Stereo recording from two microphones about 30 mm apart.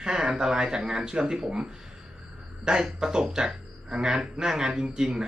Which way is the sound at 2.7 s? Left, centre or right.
Right.